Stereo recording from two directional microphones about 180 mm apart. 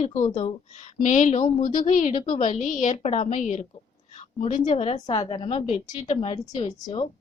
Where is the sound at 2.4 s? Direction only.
45° left (ahead or behind).